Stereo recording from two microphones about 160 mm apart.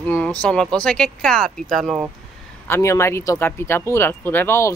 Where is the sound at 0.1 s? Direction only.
5° left (ahead or behind).